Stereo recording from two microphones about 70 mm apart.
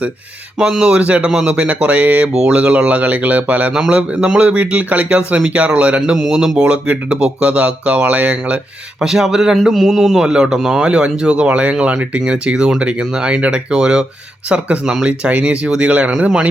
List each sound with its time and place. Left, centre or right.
0.6 s speech: centre
2.3 s speech: centre
6.1 s speech: centre
9.0 s speech: centre